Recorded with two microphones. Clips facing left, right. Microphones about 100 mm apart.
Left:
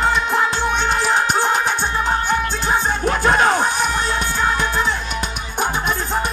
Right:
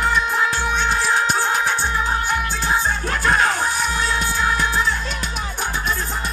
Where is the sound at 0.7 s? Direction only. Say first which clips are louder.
Left 1 dB; 20° left (ahead or behind).